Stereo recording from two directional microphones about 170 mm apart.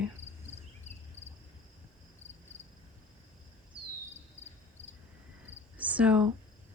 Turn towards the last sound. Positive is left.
turn(degrees=-10)  # may be behind; listen again after turning